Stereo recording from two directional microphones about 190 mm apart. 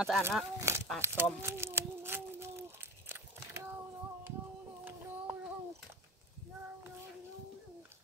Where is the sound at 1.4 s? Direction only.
10° right (ahead or behind).